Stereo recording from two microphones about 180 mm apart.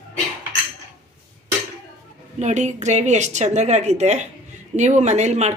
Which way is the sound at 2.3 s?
40° right (ahead or behind).